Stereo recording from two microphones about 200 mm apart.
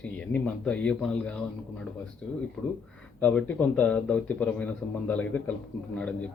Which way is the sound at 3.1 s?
5° left (ahead or behind).